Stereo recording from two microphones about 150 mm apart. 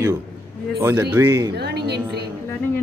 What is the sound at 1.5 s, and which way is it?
Speech, 90° right.